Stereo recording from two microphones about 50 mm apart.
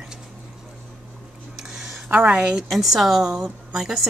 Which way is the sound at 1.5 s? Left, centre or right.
Centre.